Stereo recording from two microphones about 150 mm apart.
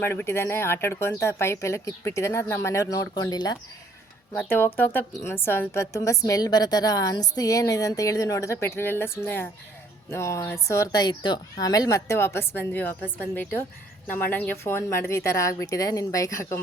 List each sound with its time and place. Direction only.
0.0 s a woman's voice: 15° left (ahead or behind)
4.4 s a woman's voice: 15° left (ahead or behind)